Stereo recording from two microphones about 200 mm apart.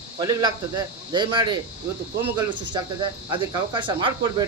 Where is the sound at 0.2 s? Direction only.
20° right (ahead or behind).